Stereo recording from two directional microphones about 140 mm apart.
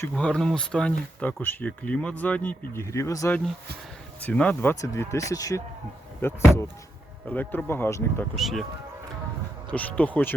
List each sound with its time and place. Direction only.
0.1 s speech: 5° left (ahead or behind); by 3.3 s 20° left (ahead or behind)
4.2 s speech: 10° left (ahead or behind)
4.7 s speech: 20° left (ahead or behind)
8.4 s speech: centre (ahead or behind)
9.7 s speech: 10° left (ahead or behind)